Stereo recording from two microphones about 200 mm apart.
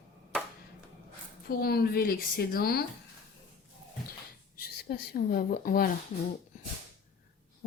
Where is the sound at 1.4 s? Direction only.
50° left (ahead or behind).